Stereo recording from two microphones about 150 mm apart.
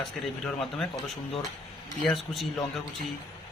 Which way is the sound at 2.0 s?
5° left (ahead or behind).